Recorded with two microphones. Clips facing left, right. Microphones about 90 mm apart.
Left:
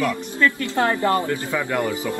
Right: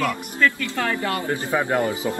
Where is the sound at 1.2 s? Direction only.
20° right (ahead or behind).